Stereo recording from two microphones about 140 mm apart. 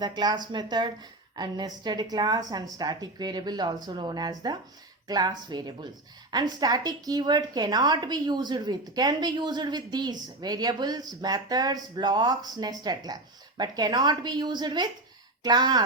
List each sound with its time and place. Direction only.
0.0 s a woman's voice: 30° right (ahead or behind)